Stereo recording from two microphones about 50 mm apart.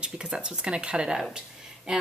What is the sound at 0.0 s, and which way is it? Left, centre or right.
Speech, centre.